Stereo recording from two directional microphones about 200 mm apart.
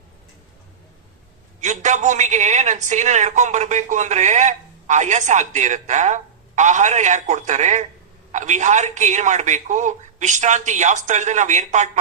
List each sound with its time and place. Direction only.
1.6 s a woman's voice: 35° right (ahead or behind)